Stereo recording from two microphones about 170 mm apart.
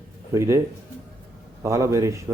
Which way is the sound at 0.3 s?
15° right (ahead or behind).